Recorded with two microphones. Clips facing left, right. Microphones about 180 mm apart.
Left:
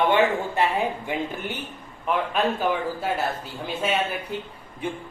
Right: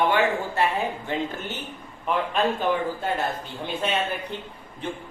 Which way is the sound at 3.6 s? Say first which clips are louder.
Left 1 dB; 5° left (ahead or behind).